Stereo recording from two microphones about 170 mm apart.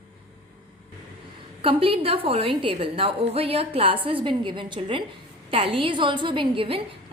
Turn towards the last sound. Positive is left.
turn(degrees=-30)  # may be behind; listen again after turning